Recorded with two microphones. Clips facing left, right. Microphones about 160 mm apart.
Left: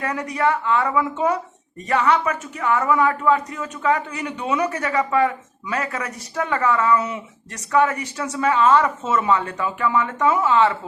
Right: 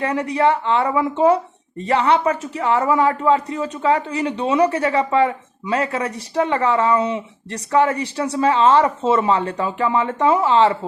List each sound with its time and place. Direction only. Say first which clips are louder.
0.0 s speech: right 4 dB; 30° right (ahead or behind)